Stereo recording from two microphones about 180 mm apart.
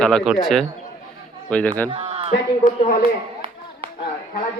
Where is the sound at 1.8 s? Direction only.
25° right (ahead or behind).